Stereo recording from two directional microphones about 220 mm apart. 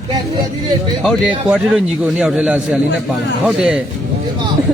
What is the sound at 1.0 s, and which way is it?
Speech, centre (ahead or behind).